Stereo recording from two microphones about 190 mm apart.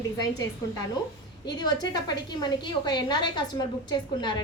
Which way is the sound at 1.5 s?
20° left (ahead or behind).